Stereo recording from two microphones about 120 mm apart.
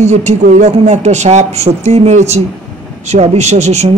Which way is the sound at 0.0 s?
70° right (ahead or behind).